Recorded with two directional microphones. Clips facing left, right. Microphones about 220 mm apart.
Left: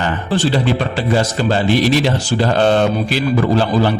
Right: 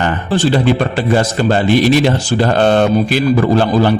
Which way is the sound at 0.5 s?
50° right (ahead or behind).